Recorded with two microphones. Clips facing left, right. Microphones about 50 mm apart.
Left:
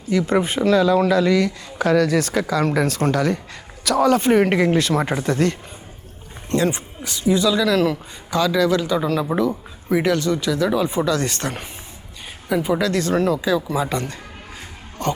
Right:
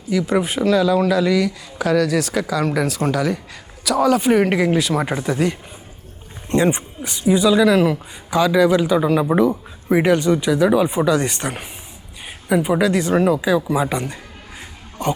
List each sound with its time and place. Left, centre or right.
0.3 s speech: centre
2.8 s speech: centre
6.5 s speech: right